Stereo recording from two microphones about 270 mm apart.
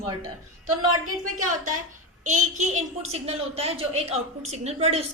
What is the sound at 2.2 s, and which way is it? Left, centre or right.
A woman's voice, right.